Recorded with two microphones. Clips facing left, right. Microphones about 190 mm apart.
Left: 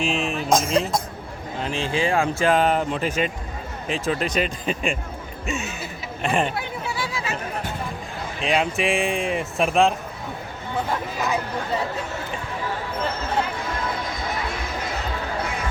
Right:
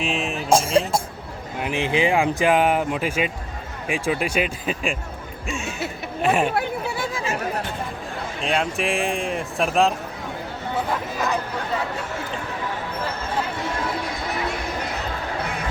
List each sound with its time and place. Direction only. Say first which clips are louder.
0.0 s speech: left 1 dB; centre (ahead or behind)
0.4 s speech: right 3 dB; 30° right (ahead or behind)
1.6 s speech: right 3 dB; 15° right (ahead or behind); by 4.9 s centre (ahead or behind)
6.2 s speech: right 3 dB; 5° right (ahead or behind)
6.5 s chatter: right 5 dB; 55° right (ahead or behind)
8.4 s speech: left 2 dB; centre (ahead or behind)